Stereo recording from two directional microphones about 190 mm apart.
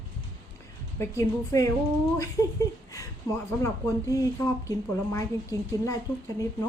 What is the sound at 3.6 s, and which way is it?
A woman's voice, 15° left (ahead or behind).